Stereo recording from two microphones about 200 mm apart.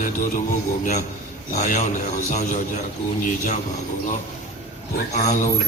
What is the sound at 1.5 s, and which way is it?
A man's voice, 35° left (ahead or behind).